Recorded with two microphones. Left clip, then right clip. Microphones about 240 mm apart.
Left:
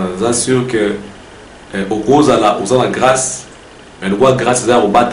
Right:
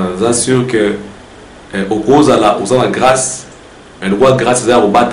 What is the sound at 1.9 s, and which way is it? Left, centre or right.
Speech, right.